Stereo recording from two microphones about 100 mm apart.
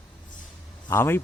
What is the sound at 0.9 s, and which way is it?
Speech, 25° left (ahead or behind).